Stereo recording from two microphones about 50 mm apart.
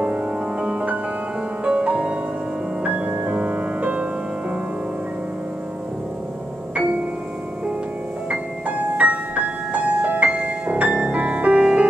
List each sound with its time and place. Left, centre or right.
0.0 s music: right
3.3 s music: right
8.3 s music: right